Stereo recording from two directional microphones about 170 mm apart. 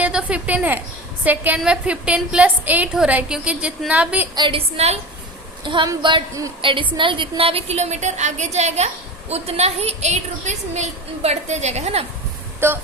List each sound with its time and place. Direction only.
0.0 s a woman's voice: 5° right (ahead or behind)
4.4 s a woman's voice: 30° right (ahead or behind)
12.5 s a sound: 15° right (ahead or behind)